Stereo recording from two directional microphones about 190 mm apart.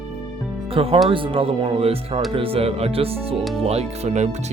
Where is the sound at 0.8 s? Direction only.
30° right (ahead or behind).